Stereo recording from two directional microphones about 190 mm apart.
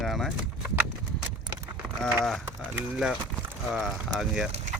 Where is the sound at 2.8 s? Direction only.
5° right (ahead or behind).